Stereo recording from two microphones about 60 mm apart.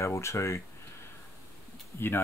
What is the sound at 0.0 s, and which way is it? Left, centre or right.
Speech, left.